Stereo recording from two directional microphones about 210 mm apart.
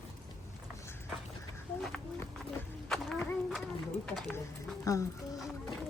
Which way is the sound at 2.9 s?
Centre (ahead or behind).